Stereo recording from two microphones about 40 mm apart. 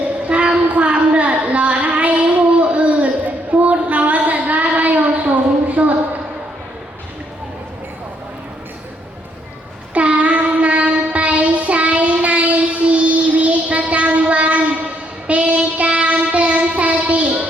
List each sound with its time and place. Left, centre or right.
0.3 s child singing: right
9.9 s child singing: right